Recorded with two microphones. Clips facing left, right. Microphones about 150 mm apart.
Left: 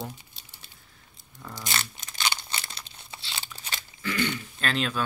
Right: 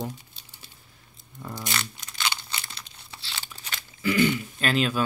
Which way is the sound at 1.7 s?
25° left (ahead or behind).